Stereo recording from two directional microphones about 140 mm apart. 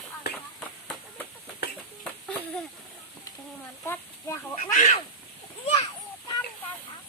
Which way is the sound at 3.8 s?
20° left (ahead or behind).